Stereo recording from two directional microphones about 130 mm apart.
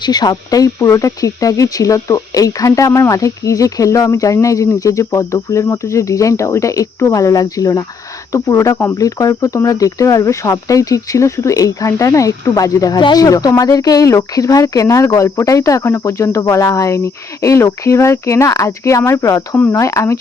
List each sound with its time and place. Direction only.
0.0 s speech: 30° left (ahead or behind)